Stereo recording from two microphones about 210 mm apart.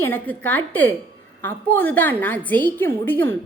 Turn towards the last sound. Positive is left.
turn(degrees=10)  # may be behind; listen again after turning